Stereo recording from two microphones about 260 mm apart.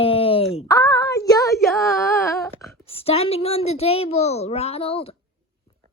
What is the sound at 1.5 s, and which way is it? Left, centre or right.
A woman's voice, centre.